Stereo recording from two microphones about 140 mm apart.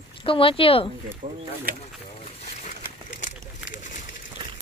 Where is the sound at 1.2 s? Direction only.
60° right (ahead or behind).